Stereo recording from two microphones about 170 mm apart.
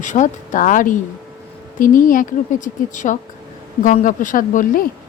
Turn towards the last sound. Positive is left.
turn(degrees=50)  # may be behind; listen again after turning